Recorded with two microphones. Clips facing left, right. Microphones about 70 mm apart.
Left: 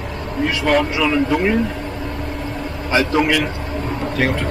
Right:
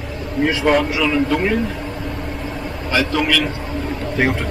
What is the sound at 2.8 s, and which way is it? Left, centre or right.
Speech, left.